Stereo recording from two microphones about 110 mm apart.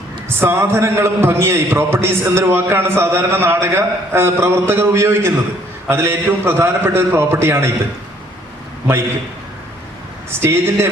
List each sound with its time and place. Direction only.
0.3 s a man's voice: 20° right (ahead or behind)
10.4 s a man's voice: 25° right (ahead or behind)